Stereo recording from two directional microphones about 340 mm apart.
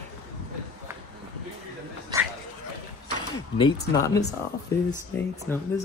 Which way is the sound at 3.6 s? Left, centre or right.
Centre.